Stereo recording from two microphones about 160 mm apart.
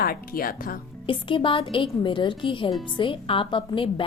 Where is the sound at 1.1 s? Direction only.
35° left (ahead or behind).